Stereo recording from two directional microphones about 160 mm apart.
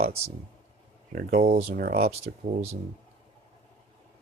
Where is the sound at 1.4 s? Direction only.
40° right (ahead or behind).